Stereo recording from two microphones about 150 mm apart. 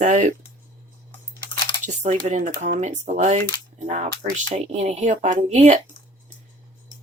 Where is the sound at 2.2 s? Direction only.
55° right (ahead or behind).